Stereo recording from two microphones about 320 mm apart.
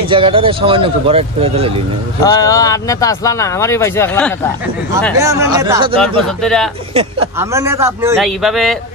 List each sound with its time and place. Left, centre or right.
0.1 s speech: centre
2.2 s speech: centre
5.2 s speech: centre
6.2 s speech: centre
6.9 s speech: centre